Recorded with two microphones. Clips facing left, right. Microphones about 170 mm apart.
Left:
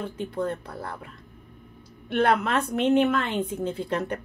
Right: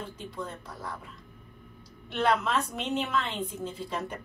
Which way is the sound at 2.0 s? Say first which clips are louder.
Left 4 dB; 55° left (ahead or behind).